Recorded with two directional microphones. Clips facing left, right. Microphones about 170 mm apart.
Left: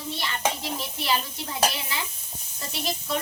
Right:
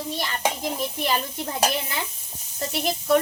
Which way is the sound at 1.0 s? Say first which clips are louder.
Right 2 dB; 50° right (ahead or behind).